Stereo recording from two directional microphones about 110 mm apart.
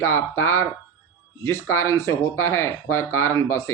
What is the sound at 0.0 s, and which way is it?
Speech, 25° left (ahead or behind).